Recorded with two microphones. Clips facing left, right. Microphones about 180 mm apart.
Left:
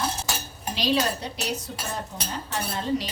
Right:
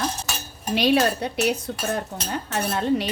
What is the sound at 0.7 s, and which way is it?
Speech, 60° right (ahead or behind).